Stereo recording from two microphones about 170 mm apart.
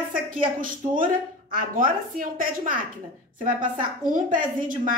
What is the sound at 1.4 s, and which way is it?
A woman's voice, 55° right (ahead or behind).